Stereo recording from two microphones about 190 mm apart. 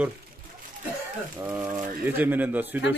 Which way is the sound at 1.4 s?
10° right (ahead or behind).